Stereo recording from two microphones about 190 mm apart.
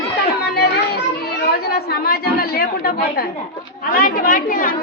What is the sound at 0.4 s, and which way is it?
Chatter, 55° left (ahead or behind).